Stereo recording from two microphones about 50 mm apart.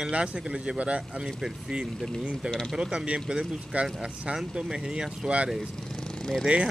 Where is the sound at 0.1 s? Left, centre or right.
Right.